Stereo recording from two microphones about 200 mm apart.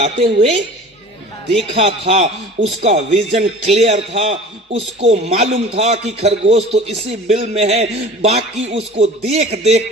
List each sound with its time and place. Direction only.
0.0 s a man's voice: 35° right (ahead or behind)
1.5 s a man's voice: 30° right (ahead or behind)